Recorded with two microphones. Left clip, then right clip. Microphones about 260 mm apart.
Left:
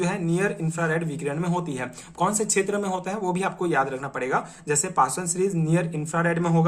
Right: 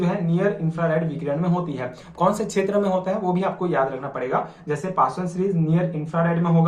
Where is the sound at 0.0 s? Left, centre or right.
Left.